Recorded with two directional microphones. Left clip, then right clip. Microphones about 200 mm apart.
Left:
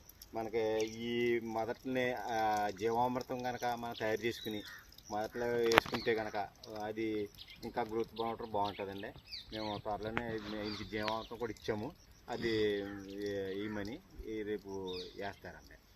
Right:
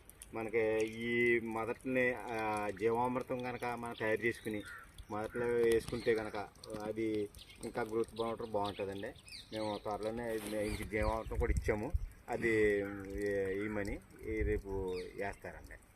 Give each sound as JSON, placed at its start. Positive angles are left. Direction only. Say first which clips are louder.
{"t": 0.3, "sound": "speech", "louder": "right 1 dB", "side_deg": 0}
{"t": 12.6, "sound": "speech", "louder": "right 3 dB", "side_deg": 10}